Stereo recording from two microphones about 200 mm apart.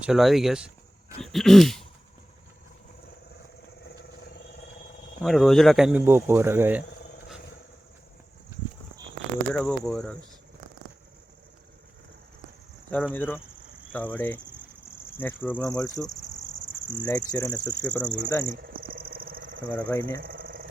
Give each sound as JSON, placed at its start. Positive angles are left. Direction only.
{"t": 0.0, "sound": "speech", "side_deg": 0}
{"t": 5.2, "sound": "speech", "side_deg": 0}
{"t": 9.5, "sound": "speech", "side_deg": 5}
{"t": 13.1, "sound": "speech", "side_deg": 10}
{"t": 17.8, "sound": "speech", "side_deg": 5}
{"t": 18.5, "sound": "a sound", "side_deg": -45}
{"t": 19.6, "sound": "speech", "side_deg": 10}
{"t": 20.2, "sound": "a sound", "side_deg": -45}